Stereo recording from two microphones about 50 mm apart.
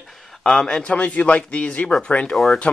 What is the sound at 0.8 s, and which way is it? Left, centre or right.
Speech, left.